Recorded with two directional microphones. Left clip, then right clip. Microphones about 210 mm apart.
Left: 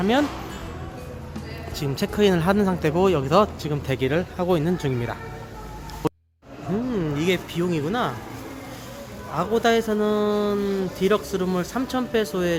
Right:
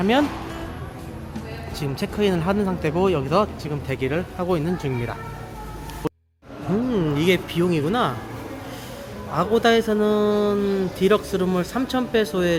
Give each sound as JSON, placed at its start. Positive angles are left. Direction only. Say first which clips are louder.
{"t": 0.0, "sound": "a man's voice", "louder": "right 2 dB", "side_deg": 0}
{"t": 1.8, "sound": "speech", "louder": "left 2 dB", "side_deg": 10}
{"t": 6.9, "sound": "speech", "louder": "right 3 dB", "side_deg": -10}
{"t": 9.3, "sound": "a man's voice", "louder": "right 2 dB", "side_deg": 0}